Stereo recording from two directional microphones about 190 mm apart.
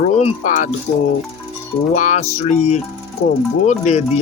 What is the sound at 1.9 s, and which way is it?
Speech, 40° left (ahead or behind).